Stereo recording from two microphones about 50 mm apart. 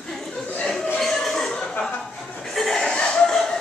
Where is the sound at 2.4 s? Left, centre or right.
Centre.